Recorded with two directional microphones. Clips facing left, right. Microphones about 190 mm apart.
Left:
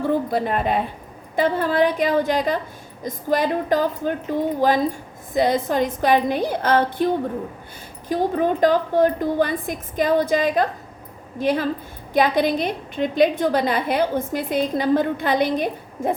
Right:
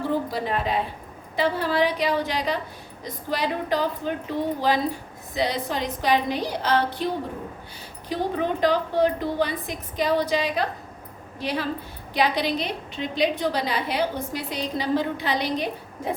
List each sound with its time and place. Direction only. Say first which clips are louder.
0.3 s a woman's voice: left 5 dB; 55° left (ahead or behind)